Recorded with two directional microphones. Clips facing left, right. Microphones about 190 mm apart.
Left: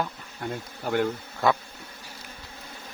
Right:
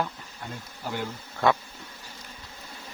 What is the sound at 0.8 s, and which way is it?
Speech, 60° left (ahead or behind).